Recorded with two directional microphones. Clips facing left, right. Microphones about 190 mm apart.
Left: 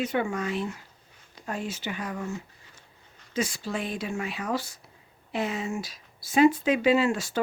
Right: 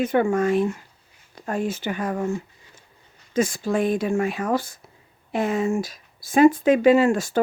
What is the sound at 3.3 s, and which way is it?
Speech, 50° right (ahead or behind).